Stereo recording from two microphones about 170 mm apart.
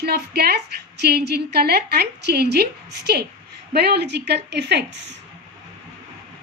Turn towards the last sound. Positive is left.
turn(degrees=-90)